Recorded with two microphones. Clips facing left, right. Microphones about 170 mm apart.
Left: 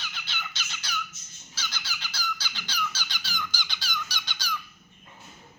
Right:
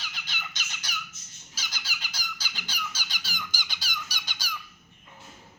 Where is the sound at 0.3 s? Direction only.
15° right (ahead or behind).